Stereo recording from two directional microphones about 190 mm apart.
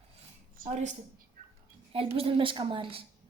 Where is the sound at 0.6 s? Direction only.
40° right (ahead or behind).